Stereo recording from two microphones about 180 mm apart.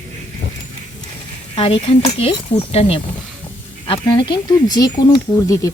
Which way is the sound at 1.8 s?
30° left (ahead or behind).